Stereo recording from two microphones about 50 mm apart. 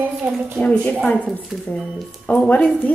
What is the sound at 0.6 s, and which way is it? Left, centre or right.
Speech, left.